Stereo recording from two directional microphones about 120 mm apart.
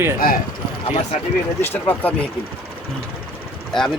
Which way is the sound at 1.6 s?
15° left (ahead or behind).